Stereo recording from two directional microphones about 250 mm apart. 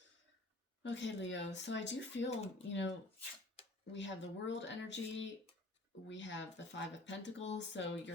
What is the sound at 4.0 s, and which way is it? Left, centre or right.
Speech, left.